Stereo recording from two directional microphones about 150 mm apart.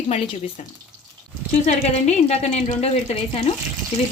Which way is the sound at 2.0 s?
45° left (ahead or behind).